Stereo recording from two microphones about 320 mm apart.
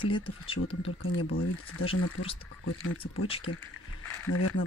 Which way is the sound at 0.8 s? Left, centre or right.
Left.